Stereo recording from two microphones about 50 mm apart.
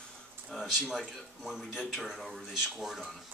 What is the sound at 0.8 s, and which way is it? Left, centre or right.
Speech, centre.